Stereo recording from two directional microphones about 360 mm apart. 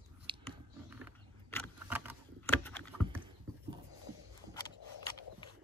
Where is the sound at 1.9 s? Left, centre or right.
Centre.